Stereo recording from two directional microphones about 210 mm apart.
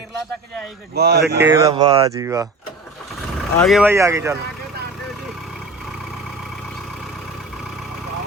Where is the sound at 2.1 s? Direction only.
15° right (ahead or behind).